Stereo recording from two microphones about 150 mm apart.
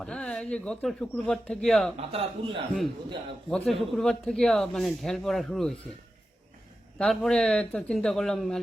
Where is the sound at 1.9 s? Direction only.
40° right (ahead or behind).